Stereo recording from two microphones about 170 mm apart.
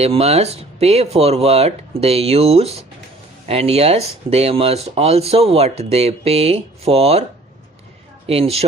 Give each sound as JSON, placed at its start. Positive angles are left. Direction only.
{"t": 0.0, "sound": "speech", "side_deg": -35}
{"t": 8.3, "sound": "speech", "side_deg": -35}